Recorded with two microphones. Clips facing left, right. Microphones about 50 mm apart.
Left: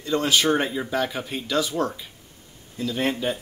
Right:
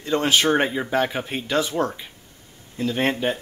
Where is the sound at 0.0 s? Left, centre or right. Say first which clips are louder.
Right 2 dB; right.